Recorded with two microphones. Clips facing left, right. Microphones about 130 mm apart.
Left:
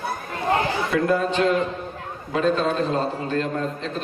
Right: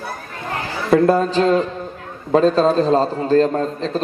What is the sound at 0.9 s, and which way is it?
A man's voice, 35° right (ahead or behind).